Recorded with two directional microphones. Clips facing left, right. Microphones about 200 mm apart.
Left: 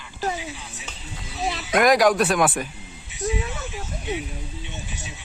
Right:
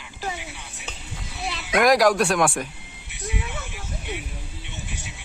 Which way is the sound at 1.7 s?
Centre (ahead or behind).